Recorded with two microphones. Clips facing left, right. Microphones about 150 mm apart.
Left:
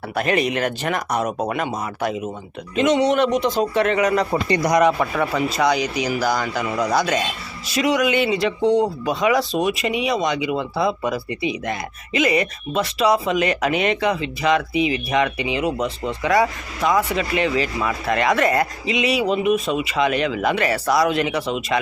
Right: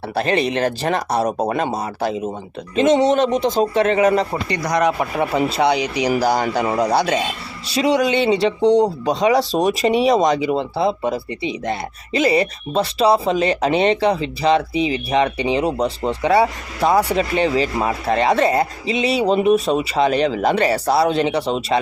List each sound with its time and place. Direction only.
0.1 s speech: 30° right (ahead or behind)
4.4 s speech: 30° left (ahead or behind)
4.9 s speech: 20° right (ahead or behind)